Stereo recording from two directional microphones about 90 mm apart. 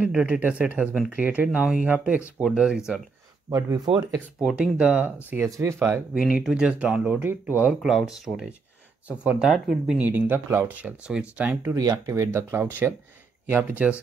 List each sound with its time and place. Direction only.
0.0 s speech: 15° right (ahead or behind)
3.4 s speech: 40° right (ahead or behind)
3.8 s speech: 55° right (ahead or behind)
4.6 s speech: 15° right (ahead or behind)
5.6 s speech: 30° right (ahead or behind)
6.1 s speech: 10° right (ahead or behind)
7.8 s speech: 5° right (ahead or behind)
9.5 s speech: centre (ahead or behind)
9.9 s speech: 20° right (ahead or behind)
10.8 s speech: 15° right (ahead or behind)
11.7 s speech: 40° right (ahead or behind); by 14.0 s 15° right (ahead or behind)